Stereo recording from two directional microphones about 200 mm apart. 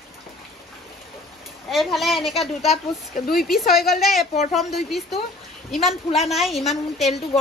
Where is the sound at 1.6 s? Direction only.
Centre (ahead or behind).